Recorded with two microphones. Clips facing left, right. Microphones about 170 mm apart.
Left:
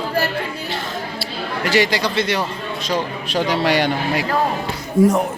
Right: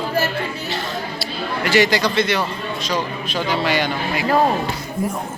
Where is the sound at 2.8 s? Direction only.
65° left (ahead or behind).